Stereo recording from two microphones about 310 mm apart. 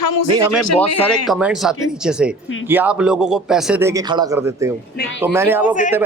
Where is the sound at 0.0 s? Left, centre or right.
Left.